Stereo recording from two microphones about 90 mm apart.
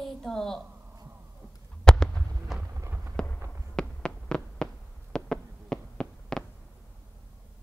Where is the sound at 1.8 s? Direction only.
10° left (ahead or behind).